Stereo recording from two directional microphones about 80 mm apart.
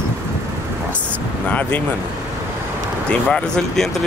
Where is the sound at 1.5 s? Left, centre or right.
Centre.